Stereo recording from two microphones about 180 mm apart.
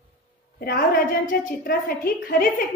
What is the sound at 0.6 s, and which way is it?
A woman's voice, 55° left (ahead or behind).